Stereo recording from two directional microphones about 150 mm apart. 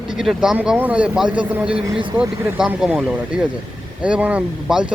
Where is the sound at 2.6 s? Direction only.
5° right (ahead or behind).